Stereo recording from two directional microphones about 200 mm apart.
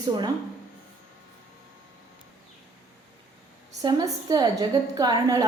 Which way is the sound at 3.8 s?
20° right (ahead or behind).